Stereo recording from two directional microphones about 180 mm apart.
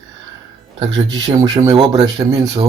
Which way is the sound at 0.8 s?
20° right (ahead or behind).